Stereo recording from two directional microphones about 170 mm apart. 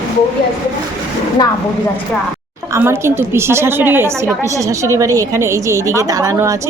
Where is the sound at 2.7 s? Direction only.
15° right (ahead or behind).